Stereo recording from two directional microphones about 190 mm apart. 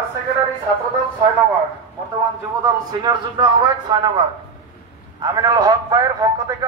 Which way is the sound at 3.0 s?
20° right (ahead or behind).